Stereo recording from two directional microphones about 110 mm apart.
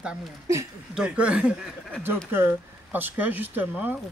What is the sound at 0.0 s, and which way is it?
Speech, 10° right (ahead or behind).